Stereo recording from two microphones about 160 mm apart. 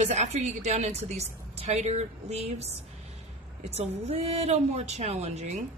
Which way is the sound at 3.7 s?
40° right (ahead or behind).